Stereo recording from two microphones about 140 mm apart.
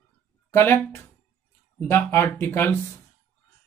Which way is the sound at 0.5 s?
15° left (ahead or behind).